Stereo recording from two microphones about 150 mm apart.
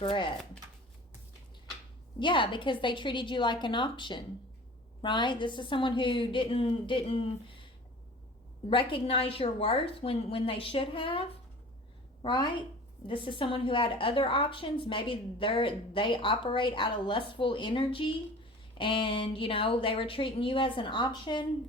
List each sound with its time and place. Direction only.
0.0 s a woman's voice: 35° left (ahead or behind)
2.1 s a woman's voice: 35° left (ahead or behind)
8.7 s a woman's voice: 35° left (ahead or behind)